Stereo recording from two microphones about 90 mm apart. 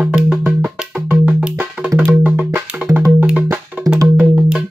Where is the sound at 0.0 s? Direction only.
5° right (ahead or behind).